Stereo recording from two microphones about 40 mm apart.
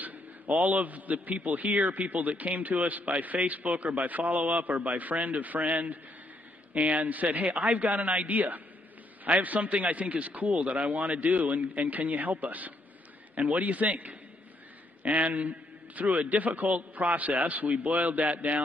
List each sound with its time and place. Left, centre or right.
0.0 s a man's voice: right
15.2 s a man's voice: right